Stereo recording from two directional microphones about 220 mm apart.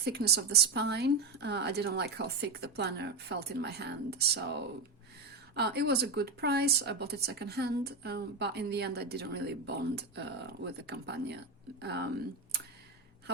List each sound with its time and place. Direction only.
0.0 s speech: 50° right (ahead or behind)